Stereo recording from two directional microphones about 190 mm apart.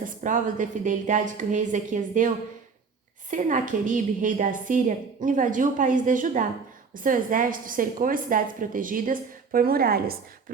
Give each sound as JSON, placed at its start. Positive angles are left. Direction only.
{"t": 0.0, "sound": "a woman's voice", "side_deg": -45}